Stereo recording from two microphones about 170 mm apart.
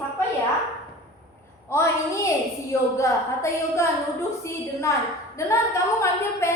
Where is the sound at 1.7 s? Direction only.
15° left (ahead or behind).